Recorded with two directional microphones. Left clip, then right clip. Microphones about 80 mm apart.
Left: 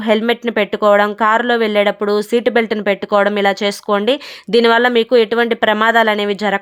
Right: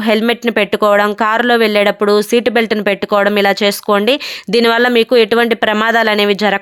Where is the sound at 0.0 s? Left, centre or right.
Right.